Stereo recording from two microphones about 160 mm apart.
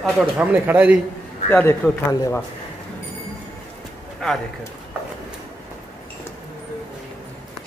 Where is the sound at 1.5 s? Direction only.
10° left (ahead or behind).